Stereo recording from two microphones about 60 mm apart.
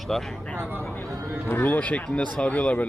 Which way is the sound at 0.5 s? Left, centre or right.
Right.